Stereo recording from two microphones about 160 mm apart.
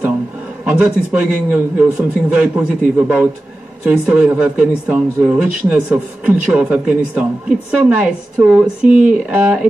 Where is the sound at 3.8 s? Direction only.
10° right (ahead or behind).